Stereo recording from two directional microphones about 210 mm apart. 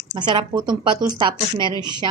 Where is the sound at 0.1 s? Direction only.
20° right (ahead or behind).